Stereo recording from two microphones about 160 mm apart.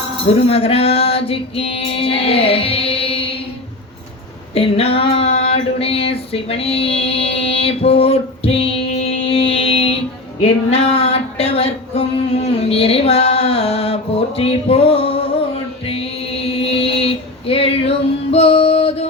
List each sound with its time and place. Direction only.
0.3 s music: 40° left (ahead or behind)
4.5 s female singing: 35° left (ahead or behind)
10.7 s a sound: 40° left (ahead or behind)
15.9 s female singing: 35° left (ahead or behind)